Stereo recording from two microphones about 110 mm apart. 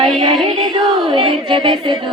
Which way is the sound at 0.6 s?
50° right (ahead or behind).